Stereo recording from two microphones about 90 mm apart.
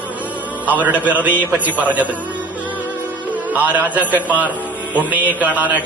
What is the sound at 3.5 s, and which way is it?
A man's voice, 20° right (ahead or behind).